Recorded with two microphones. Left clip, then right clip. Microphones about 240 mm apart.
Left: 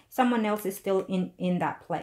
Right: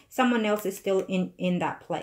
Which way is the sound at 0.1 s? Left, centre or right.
Left.